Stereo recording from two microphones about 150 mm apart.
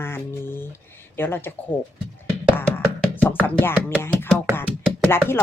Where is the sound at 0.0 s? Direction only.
15° left (ahead or behind).